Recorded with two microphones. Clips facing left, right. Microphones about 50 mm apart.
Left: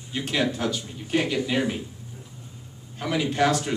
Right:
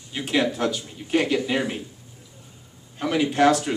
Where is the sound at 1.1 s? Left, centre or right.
Right.